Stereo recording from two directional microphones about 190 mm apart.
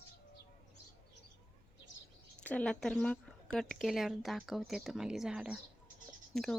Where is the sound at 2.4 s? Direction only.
5° left (ahead or behind).